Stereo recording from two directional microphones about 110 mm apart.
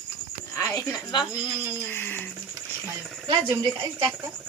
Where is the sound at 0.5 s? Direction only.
30° left (ahead or behind).